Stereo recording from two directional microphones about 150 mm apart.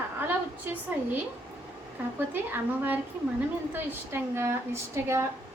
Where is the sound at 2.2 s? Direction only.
15° right (ahead or behind).